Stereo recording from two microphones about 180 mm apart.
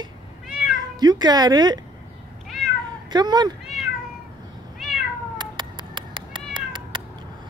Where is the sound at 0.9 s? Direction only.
20° right (ahead or behind).